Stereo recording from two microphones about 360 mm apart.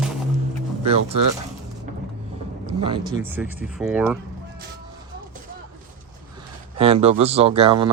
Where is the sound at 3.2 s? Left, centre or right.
Centre.